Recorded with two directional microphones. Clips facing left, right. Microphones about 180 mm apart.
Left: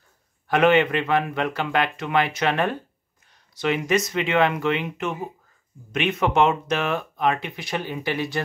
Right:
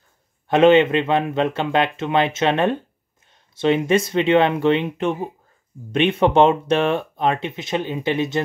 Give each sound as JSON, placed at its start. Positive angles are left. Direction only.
{"t": 0.5, "sound": "speech", "side_deg": -25}